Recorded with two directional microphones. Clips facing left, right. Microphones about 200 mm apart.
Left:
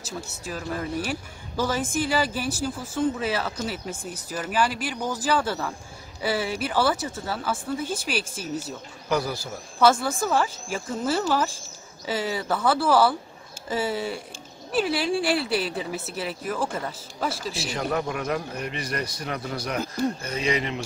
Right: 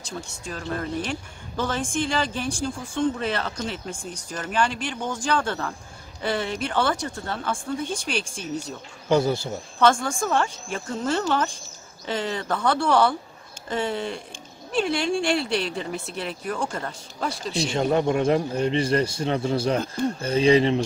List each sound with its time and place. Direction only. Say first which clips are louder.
0.0 s speech: even; 5° left (ahead or behind)
9.1 s a man's voice: right 5 dB; 25° right (ahead or behind)
9.8 s speech: even; 5° left (ahead or behind)
17.6 s a man's voice: right 6 dB; 25° right (ahead or behind)